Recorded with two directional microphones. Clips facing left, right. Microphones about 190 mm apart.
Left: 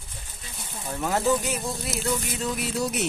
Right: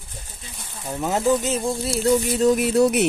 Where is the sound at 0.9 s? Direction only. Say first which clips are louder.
Right 4 dB; 20° right (ahead or behind).